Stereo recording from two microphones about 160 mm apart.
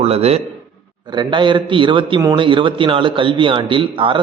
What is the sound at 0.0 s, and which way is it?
Speech, 40° right (ahead or behind).